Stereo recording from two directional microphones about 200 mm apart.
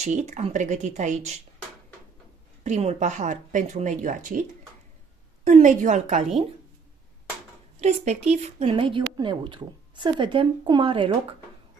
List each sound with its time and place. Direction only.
0.0 s speech: 35° right (ahead or behind)
2.6 s speech: 30° right (ahead or behind)
7.8 s a woman's voice: 35° right (ahead or behind)